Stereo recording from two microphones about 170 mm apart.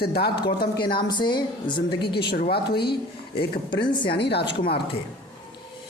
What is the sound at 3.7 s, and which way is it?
Speech, 25° left (ahead or behind).